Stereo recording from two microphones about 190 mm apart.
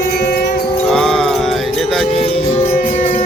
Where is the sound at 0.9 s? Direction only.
5° left (ahead or behind).